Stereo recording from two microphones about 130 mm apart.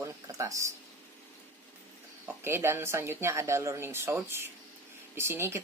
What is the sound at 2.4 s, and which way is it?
Speech, 20° right (ahead or behind).